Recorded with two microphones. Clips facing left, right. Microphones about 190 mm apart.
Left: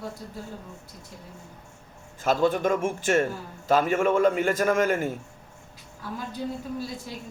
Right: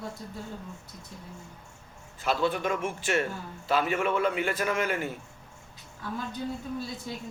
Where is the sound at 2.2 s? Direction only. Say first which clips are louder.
Left 5 dB; 45° left (ahead or behind).